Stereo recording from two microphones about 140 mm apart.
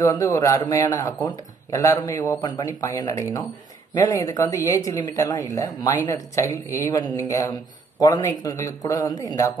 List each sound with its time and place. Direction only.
0.0 s speech: 25° left (ahead or behind)